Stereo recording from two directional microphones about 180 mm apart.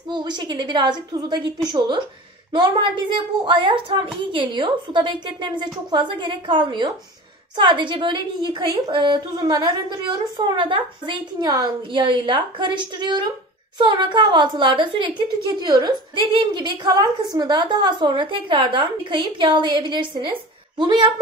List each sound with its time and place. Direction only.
0.1 s a woman's voice: 25° right (ahead or behind)